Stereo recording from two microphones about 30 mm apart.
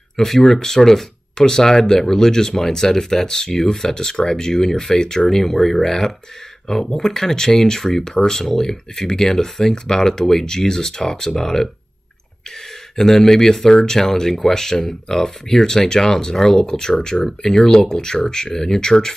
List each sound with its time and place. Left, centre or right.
0.2 s speech: centre
9.1 s speech: centre
12.9 s speech: centre